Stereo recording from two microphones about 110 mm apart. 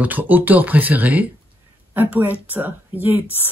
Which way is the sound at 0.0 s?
15° right (ahead or behind).